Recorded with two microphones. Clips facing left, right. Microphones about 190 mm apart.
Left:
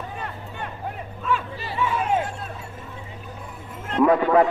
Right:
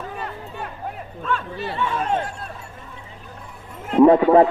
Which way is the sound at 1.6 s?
Centre (ahead or behind).